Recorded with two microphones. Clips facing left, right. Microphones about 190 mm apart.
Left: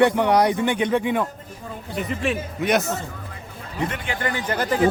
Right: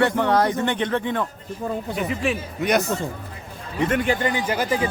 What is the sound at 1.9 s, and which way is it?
Speech, centre (ahead or behind).